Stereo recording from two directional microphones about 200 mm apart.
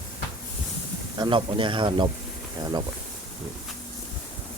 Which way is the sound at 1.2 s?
25° right (ahead or behind).